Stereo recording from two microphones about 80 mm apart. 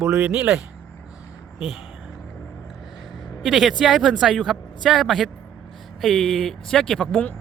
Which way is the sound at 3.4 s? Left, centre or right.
Centre.